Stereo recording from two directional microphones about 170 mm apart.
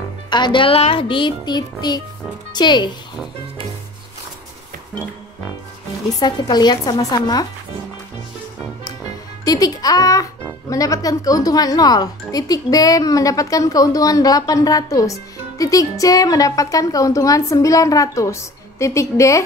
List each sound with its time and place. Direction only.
0.3 s a woman's voice: 25° left (ahead or behind)
6.1 s a woman's voice: 25° left (ahead or behind)
9.4 s a woman's voice: 20° left (ahead or behind)